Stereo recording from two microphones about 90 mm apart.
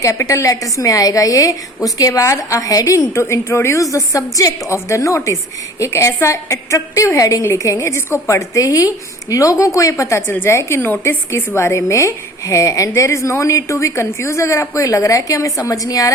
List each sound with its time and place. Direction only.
0.0 s a woman's voice: 35° left (ahead or behind)